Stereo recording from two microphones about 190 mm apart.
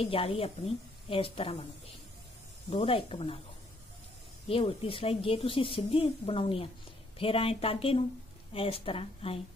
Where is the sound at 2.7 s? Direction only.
30° left (ahead or behind).